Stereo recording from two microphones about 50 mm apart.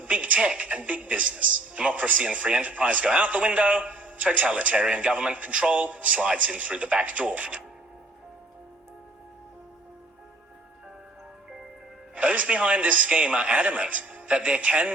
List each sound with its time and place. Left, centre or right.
0.0 s a woman's voice: right
12.1 s a woman's voice: right